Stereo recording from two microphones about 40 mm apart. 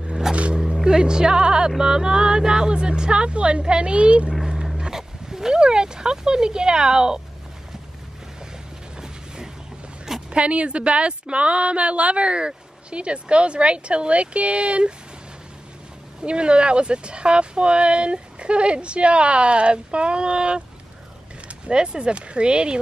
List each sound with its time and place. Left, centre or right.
0.1 s a sound: centre
0.6 s speech: centre; by 4.3 s right
4.7 s speech: centre
8.9 s a sound: centre
10.3 s speech: right
16.2 s speech: right
21.6 s speech: right